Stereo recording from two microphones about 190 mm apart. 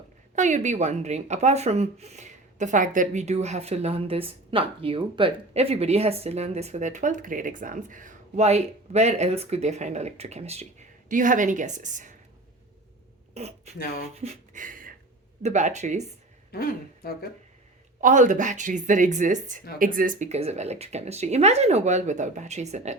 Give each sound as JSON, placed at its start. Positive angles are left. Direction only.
{"t": 0.3, "sound": "speech", "side_deg": -40}
{"t": 13.3, "sound": "speech", "side_deg": -35}
{"t": 14.2, "sound": "a sound", "side_deg": -40}
{"t": 15.4, "sound": "speech", "side_deg": -40}
{"t": 16.5, "sound": "speech", "side_deg": 55}
{"t": 18.0, "sound": "speech", "side_deg": -40}